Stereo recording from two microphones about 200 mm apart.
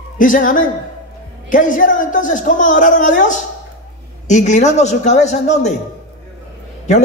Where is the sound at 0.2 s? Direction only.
40° left (ahead or behind).